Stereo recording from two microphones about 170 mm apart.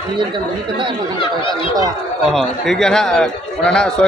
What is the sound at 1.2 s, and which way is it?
Speech, 30° left (ahead or behind).